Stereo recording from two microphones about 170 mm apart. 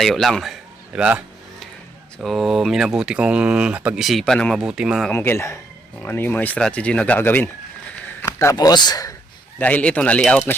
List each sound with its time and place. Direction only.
0.0 s a sound: centre (ahead or behind)
2.1 s speech: centre (ahead or behind)
5.1 s speech: 15° left (ahead or behind)
9.6 s speech: 10° left (ahead or behind)